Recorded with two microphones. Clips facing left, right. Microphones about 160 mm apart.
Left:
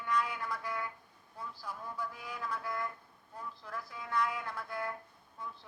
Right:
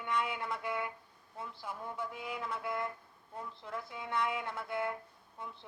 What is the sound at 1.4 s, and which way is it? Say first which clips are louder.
Speech: right 1 dB; 25° right (ahead or behind).